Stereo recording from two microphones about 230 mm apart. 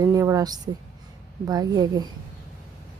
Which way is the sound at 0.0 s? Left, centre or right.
Centre.